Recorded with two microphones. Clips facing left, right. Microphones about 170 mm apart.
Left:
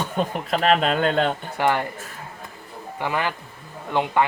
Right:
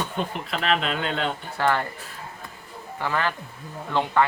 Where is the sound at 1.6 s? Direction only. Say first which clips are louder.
Left 2 dB; 15° left (ahead or behind).